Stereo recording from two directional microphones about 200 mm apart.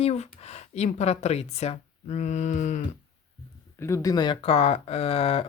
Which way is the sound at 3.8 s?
15° left (ahead or behind).